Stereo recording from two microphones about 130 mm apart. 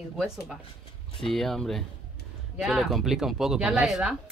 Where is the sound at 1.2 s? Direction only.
Centre (ahead or behind).